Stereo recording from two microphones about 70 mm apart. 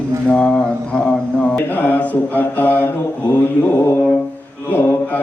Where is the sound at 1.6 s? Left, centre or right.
Left.